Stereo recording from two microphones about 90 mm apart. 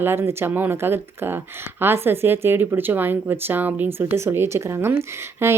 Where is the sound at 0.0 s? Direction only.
25° right (ahead or behind).